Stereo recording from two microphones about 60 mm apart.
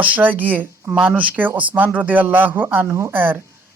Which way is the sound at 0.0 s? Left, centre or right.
Right.